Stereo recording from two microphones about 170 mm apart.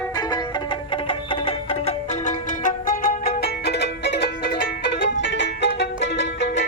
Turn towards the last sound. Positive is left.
turn(degrees=90)